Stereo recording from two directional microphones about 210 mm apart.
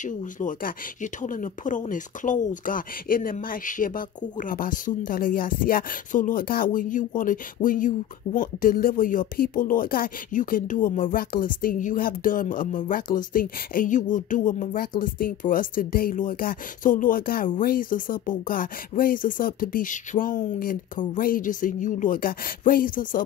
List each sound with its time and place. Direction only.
0.0 s speech: 40° left (ahead or behind)